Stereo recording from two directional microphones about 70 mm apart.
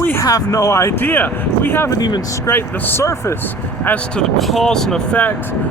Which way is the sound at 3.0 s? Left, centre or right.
Left.